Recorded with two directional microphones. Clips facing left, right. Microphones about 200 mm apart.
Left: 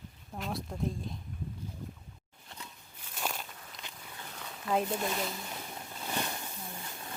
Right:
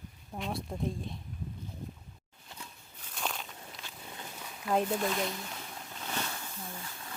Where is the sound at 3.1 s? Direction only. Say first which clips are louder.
Even; 5° left (ahead or behind).